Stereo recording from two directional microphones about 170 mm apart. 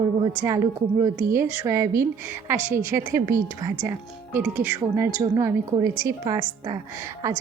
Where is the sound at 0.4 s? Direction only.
20° right (ahead or behind).